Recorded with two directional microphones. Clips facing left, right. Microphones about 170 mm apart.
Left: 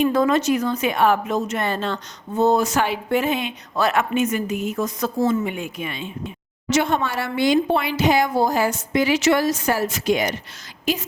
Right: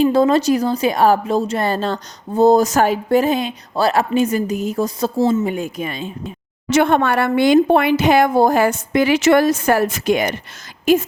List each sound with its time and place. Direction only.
0.0 s speech: 30° right (ahead or behind)
5.5 s speech: 40° right (ahead or behind)
6.7 s a woman's voice: 55° right (ahead or behind)